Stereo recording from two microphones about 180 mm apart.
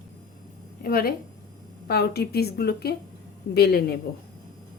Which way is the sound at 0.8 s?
55° left (ahead or behind).